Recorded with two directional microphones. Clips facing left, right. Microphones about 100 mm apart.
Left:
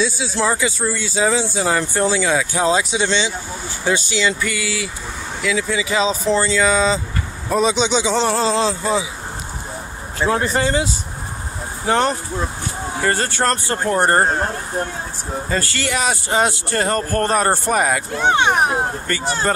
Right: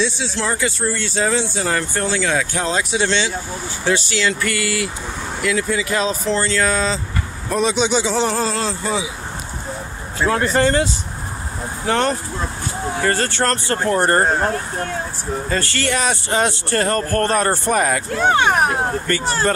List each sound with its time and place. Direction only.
0.0 s speech: 5° left (ahead or behind)
8.5 s speech: 20° left (ahead or behind)
10.2 s speech: 20° left (ahead or behind)
13.9 s speech: 25° left (ahead or behind)
15.5 s speech: 10° left (ahead or behind)
18.2 s speech: centre (ahead or behind)